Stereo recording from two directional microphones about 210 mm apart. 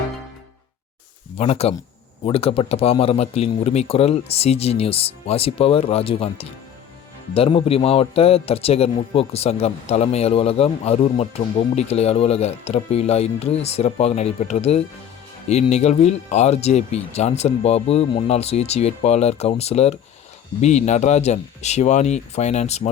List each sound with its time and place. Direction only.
1.4 s a man's voice: 30° left (ahead or behind)